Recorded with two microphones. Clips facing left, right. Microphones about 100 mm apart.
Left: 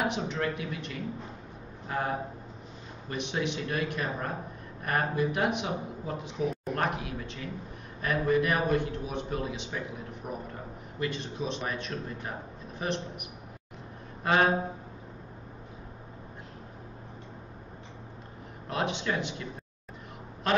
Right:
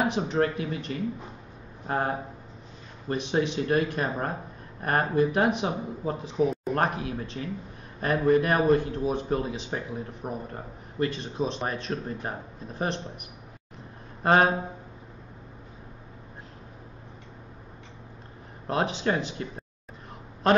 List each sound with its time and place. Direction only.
0.0 s a man's voice: 35° right (ahead or behind)
18.7 s a man's voice: 35° right (ahead or behind)